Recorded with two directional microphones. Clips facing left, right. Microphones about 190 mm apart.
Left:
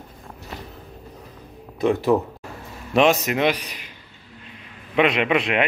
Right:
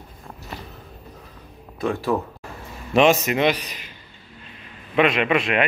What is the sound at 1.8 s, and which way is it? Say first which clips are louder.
Speech: left 4 dB; 20° left (ahead or behind).